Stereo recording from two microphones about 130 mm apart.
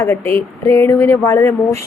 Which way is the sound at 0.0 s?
20° left (ahead or behind).